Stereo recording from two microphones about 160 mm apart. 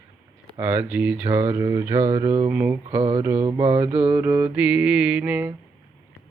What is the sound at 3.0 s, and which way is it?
Mantra, 35° right (ahead or behind).